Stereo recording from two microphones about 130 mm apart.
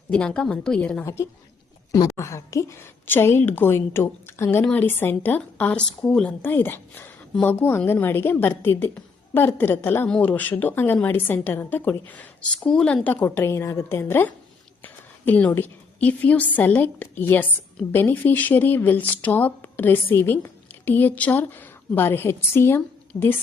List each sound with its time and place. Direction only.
0.1 s speech: 5° left (ahead or behind)
1.0 s a woman's voice: 20° left (ahead or behind)